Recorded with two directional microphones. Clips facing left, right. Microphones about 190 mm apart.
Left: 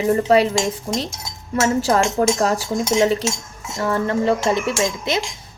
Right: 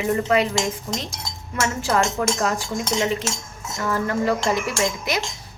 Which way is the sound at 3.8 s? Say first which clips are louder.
Left 3 dB; 30° left (ahead or behind).